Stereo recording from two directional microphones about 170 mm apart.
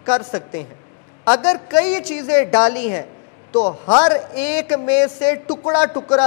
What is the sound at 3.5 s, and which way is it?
Speech, 30° left (ahead or behind).